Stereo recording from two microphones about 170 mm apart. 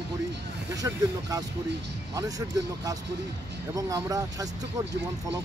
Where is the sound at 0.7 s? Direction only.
20° right (ahead or behind).